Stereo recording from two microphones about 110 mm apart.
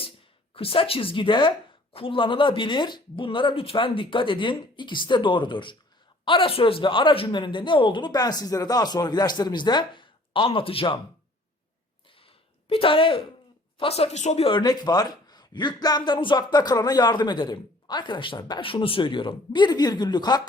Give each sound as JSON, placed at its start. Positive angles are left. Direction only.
{"t": 0.5, "sound": "a woman's voice", "side_deg": 55}
{"t": 12.2, "sound": "a sound", "side_deg": 60}
{"t": 13.7, "sound": "speech", "side_deg": 65}
{"t": 14.5, "sound": "a man's voice", "side_deg": 40}